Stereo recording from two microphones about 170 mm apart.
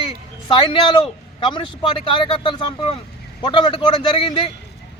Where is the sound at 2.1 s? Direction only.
30° left (ahead or behind).